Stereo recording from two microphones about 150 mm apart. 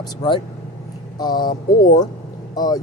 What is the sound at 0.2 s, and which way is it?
Speech, 30° left (ahead or behind).